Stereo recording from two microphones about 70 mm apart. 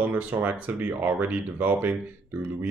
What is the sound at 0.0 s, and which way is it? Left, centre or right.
Speech, right.